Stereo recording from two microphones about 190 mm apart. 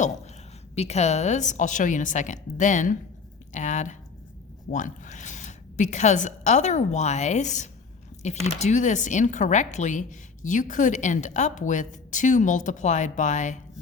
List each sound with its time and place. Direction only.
0.8 s a woman's voice: 35° left (ahead or behind)
3.5 s a sound: 40° left (ahead or behind)
4.7 s a woman's voice: 40° left (ahead or behind)